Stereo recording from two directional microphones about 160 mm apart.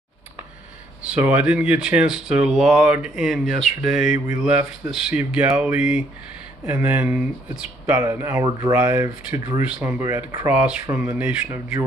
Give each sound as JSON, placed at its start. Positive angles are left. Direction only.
{"t": 1.0, "sound": "speech", "side_deg": -10}